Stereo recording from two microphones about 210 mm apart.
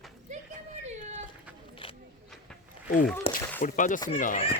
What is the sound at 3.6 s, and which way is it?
Speech, 40° left (ahead or behind).